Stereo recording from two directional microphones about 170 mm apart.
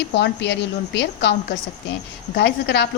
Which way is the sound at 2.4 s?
85° left.